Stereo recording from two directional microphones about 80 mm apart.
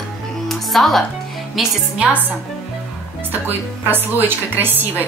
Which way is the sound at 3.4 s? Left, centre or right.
Right.